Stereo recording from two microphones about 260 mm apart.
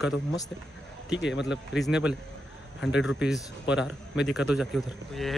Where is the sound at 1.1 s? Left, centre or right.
Left.